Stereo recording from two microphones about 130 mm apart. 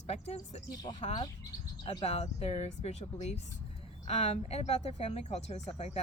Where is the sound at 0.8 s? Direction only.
35° left (ahead or behind).